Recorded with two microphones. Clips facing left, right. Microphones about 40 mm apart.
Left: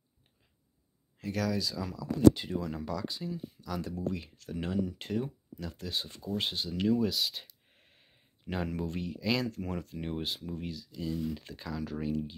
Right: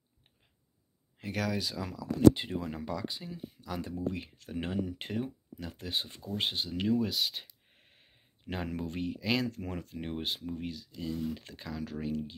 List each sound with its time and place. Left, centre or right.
1.1 s speech: right
2.8 s speech: centre